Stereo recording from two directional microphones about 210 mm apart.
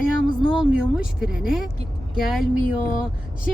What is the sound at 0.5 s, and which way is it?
Speech, 5° right (ahead or behind).